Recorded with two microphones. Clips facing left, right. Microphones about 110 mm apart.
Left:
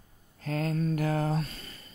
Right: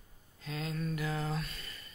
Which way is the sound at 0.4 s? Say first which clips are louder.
Left 8 dB; 50° left (ahead or behind).